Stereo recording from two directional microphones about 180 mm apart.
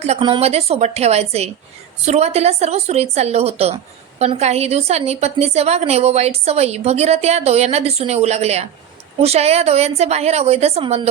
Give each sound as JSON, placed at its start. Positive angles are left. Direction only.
{"t": 0.0, "sound": "a woman's voice", "side_deg": -30}